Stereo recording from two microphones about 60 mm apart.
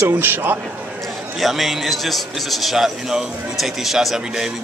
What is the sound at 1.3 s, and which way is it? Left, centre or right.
A man's voice, centre.